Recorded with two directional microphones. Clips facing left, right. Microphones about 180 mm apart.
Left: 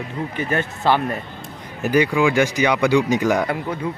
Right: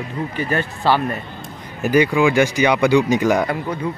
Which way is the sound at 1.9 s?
15° right (ahead or behind).